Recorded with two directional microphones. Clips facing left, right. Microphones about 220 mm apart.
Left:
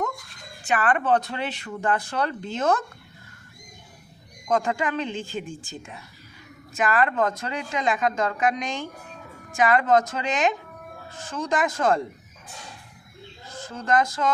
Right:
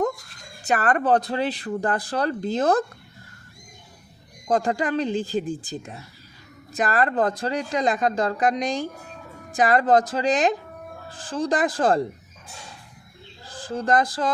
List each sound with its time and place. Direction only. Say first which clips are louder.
0.6 s speech: right 2 dB; 40° right (ahead or behind)
4.4 s speech: right 2 dB; 35° right (ahead or behind)
13.4 s speech: right 7 dB; 30° right (ahead or behind)